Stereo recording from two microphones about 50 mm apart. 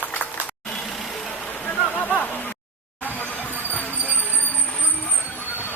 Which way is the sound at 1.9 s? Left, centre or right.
Left.